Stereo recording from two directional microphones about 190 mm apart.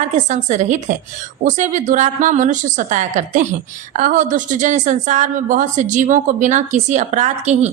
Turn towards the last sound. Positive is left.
turn(degrees=-40)  # may be behind; listen again after turning